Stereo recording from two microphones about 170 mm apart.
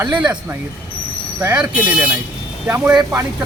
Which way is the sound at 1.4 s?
10° right (ahead or behind).